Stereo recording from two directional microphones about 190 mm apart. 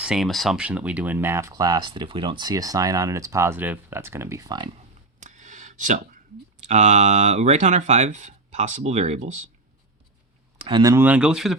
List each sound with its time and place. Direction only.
0.0 s speech: centre (ahead or behind); by 4.7 s 20° right (ahead or behind)
5.2 s a sound: 40° right (ahead or behind)
6.6 s speech: 35° right (ahead or behind)
10.7 s speech: 25° right (ahead or behind)
10.9 s speech: 10° right (ahead or behind)